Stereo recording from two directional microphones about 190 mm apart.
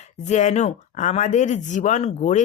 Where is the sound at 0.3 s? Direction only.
40° left (ahead or behind).